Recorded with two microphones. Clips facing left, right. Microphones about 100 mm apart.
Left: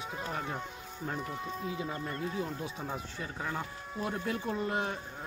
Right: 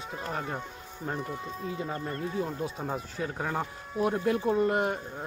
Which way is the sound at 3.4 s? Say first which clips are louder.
Right 4 dB; 40° right (ahead or behind).